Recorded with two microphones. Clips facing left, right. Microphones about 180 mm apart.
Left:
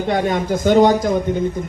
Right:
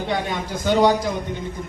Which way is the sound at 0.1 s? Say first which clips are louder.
Left 9 dB; 45° left (ahead or behind).